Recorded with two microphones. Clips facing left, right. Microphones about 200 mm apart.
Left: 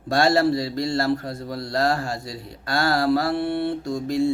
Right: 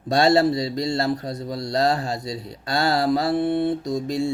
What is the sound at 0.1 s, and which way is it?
A man's voice, 20° right (ahead or behind).